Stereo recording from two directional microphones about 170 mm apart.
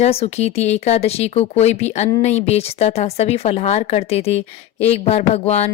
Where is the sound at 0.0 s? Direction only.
40° left (ahead or behind).